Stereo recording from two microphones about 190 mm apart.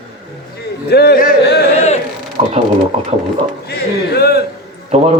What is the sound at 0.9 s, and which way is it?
Speech, 55° left (ahead or behind).